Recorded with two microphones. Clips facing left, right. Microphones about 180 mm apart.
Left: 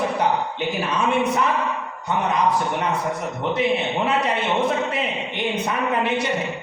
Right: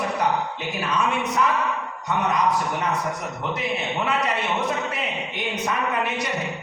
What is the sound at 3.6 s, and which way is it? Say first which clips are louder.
A man's voice: left 6 dB; 30° left (ahead or behind).